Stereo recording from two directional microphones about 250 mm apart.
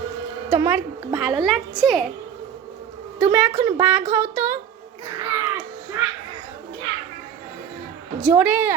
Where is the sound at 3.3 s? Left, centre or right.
Centre.